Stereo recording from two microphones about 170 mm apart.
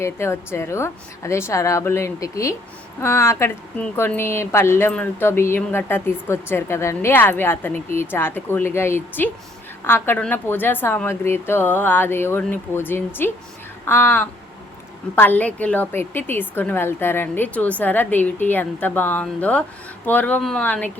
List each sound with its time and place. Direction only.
0.0 s a woman's voice: 15° left (ahead or behind)